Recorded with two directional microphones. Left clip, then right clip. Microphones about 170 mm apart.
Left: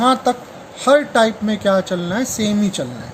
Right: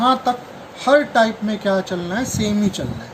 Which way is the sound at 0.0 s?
65° left (ahead or behind).